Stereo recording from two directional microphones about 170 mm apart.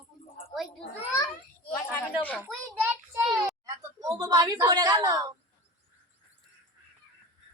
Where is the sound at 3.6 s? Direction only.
20° right (ahead or behind).